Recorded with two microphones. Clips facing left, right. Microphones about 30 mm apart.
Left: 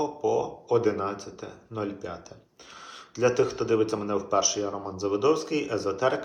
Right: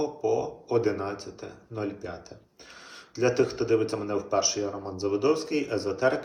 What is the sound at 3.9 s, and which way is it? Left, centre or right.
Speech, centre.